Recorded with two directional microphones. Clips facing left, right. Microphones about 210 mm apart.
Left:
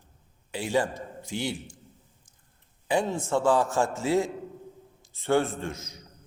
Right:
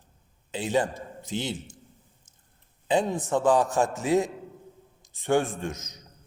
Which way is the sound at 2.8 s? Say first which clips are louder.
Right 2 dB; 20° right (ahead or behind).